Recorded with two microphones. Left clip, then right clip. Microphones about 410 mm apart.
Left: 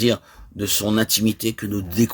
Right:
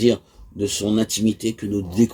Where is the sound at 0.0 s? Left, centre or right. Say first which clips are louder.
Right 2 dB; left.